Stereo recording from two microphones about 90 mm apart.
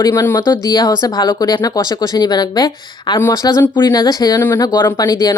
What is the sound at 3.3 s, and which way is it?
Speech, 40° left (ahead or behind).